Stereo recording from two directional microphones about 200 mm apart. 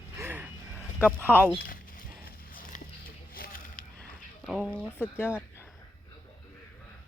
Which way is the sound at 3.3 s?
45° left (ahead or behind).